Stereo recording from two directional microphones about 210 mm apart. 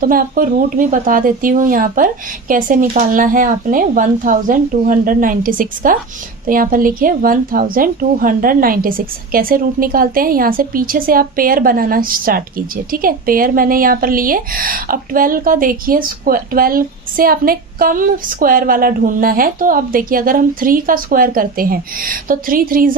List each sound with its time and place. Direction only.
0.0 s a woman's voice: 40° right (ahead or behind)